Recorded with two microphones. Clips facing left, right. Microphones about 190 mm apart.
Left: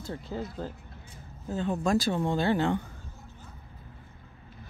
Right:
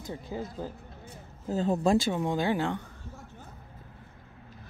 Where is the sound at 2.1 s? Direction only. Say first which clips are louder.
Left 1 dB; 15° right (ahead or behind).